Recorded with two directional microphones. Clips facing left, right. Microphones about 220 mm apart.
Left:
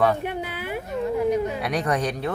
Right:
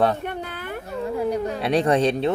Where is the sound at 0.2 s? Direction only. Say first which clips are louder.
Left 1 dB; 10° left (ahead or behind).